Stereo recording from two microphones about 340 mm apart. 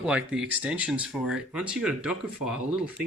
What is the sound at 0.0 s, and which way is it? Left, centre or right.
Speech, centre.